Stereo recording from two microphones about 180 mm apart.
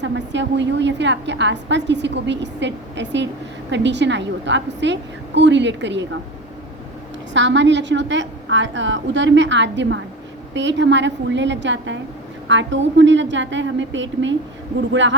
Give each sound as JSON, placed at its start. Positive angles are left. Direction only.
{"t": 0.0, "sound": "a woman's voice", "side_deg": -85}
{"t": 7.3, "sound": "a woman's voice", "side_deg": -90}